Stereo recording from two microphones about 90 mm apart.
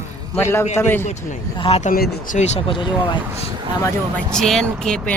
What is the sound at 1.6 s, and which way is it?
Speech, 90° left.